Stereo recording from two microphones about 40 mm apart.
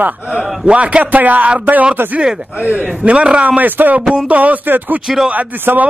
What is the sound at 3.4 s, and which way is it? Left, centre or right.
A man's voice, right.